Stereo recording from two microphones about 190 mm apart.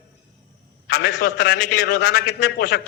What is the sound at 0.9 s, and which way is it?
A man's voice, 55° left (ahead or behind).